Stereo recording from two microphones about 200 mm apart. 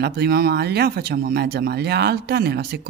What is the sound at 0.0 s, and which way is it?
Speech, 55° right (ahead or behind).